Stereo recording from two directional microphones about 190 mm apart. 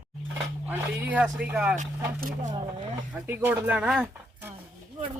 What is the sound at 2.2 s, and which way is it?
Speech, 45° right (ahead or behind).